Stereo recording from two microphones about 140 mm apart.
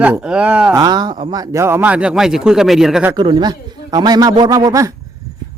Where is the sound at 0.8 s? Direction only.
30° right (ahead or behind); by 3.1 s 5° right (ahead or behind).